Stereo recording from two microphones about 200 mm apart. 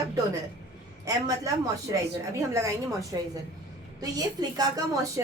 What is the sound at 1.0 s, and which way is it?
Speech, 15° right (ahead or behind).